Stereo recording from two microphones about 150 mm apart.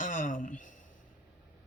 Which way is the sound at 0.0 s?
55° left (ahead or behind).